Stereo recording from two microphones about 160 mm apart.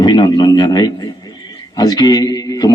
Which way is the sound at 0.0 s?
25° left (ahead or behind).